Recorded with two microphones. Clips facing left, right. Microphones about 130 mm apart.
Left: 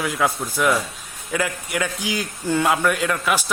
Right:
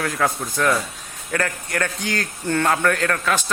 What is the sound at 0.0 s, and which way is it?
A man's voice, 5° left (ahead or behind).